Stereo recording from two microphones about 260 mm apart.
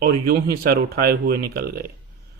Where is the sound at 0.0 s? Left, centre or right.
Right.